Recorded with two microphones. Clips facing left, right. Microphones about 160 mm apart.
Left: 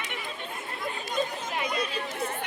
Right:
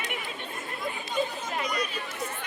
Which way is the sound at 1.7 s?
30° left (ahead or behind).